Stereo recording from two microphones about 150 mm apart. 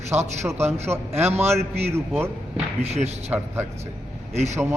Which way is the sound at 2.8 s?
45° right (ahead or behind).